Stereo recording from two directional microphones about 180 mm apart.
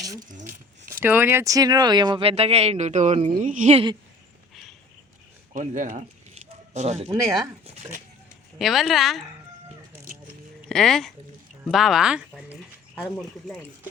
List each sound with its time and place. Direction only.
0.2 s cutlery: 45° right (ahead or behind)
0.9 s speech: 10° right (ahead or behind); by 3.8 s 40° right (ahead or behind)
5.5 s speech: 45° right (ahead or behind)
8.5 s speech: centre (ahead or behind)
10.7 s speech: 5° left (ahead or behind)
13.0 s speech: 10° left (ahead or behind)